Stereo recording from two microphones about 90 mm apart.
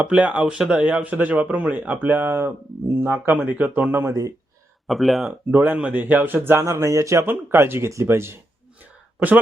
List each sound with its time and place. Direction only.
0.0 s a man's voice: 15° right (ahead or behind); by 4.3 s 30° right (ahead or behind)
4.9 s speech: centre (ahead or behind)
5.2 s speech: 20° right (ahead or behind)